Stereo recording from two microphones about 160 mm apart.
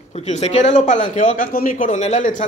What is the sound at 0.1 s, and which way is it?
A man's voice, 40° left (ahead or behind).